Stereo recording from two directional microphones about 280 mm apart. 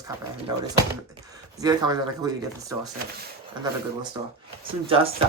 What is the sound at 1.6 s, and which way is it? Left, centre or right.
Speech, centre.